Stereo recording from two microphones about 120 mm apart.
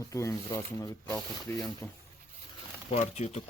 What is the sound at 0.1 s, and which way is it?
Speech, 25° left (ahead or behind).